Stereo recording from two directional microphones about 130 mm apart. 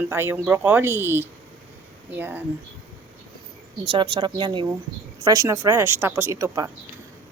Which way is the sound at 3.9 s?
35° right (ahead or behind).